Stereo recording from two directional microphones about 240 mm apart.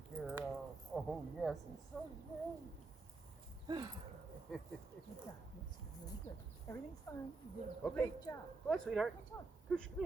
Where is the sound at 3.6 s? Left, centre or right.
Centre.